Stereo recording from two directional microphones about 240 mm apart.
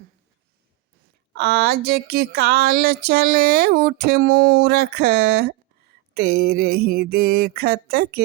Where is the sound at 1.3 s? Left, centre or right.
Right.